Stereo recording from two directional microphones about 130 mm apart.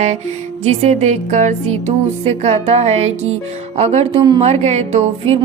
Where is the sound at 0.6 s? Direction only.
55° right (ahead or behind).